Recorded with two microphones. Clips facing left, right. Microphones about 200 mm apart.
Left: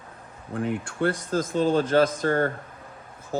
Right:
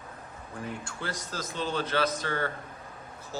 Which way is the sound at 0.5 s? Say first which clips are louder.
Left 11 dB; 65° left (ahead or behind).